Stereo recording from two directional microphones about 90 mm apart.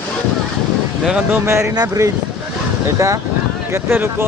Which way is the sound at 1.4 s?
30° right (ahead or behind).